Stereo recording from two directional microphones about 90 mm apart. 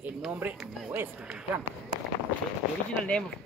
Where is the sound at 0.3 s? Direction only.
20° right (ahead or behind).